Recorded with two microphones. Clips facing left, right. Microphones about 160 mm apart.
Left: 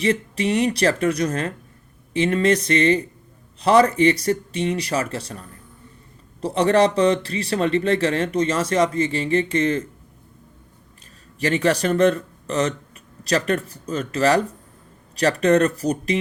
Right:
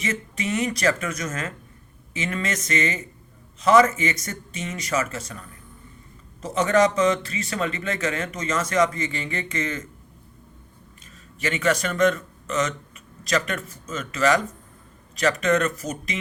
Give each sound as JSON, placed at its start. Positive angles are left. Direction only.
{"t": 0.0, "sound": "a man's voice", "side_deg": 35}
{"t": 11.3, "sound": "a man's voice", "side_deg": 35}